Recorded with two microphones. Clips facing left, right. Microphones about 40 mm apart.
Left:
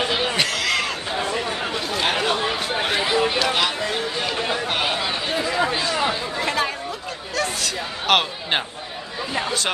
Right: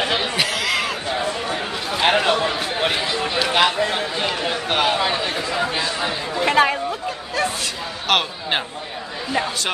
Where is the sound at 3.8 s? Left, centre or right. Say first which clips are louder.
Right 3 dB; right.